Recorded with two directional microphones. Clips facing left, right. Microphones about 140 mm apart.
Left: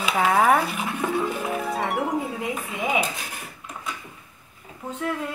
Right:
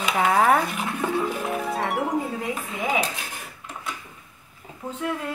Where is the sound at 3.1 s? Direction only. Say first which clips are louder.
Even; centre (ahead or behind).